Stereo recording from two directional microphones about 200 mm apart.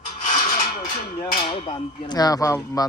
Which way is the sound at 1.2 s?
25° left (ahead or behind).